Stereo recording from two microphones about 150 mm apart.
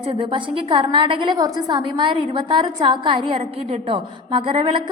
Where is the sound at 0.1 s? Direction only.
35° right (ahead or behind).